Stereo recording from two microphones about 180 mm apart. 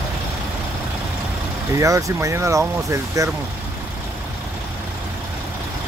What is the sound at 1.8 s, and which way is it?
Speech, 20° right (ahead or behind).